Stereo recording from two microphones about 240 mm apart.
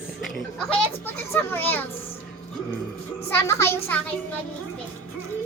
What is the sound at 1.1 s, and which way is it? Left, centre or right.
Speech, centre.